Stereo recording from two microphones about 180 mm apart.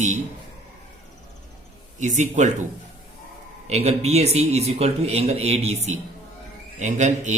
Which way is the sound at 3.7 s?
35° right (ahead or behind).